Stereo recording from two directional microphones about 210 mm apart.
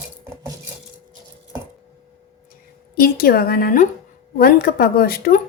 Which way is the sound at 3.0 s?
45° left (ahead or behind).